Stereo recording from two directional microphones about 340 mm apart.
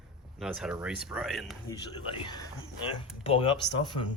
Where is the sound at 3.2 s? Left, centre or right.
Centre.